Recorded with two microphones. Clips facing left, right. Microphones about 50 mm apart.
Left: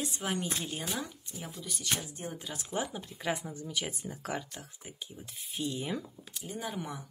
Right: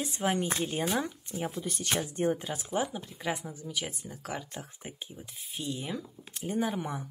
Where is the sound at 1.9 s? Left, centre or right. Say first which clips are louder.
Right 9 dB; right.